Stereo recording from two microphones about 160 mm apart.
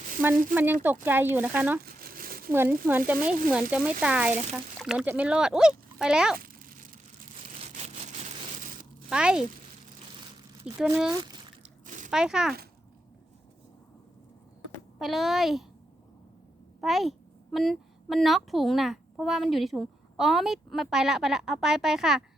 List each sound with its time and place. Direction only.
0.5 s speech: 10° right (ahead or behind)
1.8 s crumpling: 65° right (ahead or behind)
2.5 s a child's voice: 15° right (ahead or behind)
6.4 s a sound: 65° right (ahead or behind)
9.0 s speech: 5° right (ahead or behind)
10.7 s a child's voice: 5° right (ahead or behind)
11.9 s a sound: 50° right (ahead or behind)
12.1 s a child's voice: 5° right (ahead or behind)
14.9 s a child's voice: centre (ahead or behind)
16.8 s a child's voice: centre (ahead or behind)